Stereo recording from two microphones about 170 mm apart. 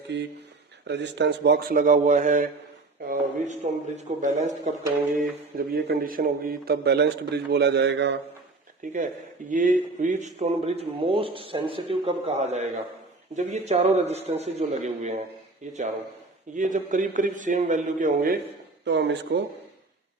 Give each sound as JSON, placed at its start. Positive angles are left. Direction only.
{"t": 0.1, "sound": "a sound", "side_deg": -90}
{"t": 0.9, "sound": "a man's voice", "side_deg": -90}
{"t": 5.5, "sound": "a man's voice", "side_deg": -60}
{"t": 8.8, "sound": "a man's voice", "side_deg": -50}
{"t": 18.9, "sound": "speech", "side_deg": -90}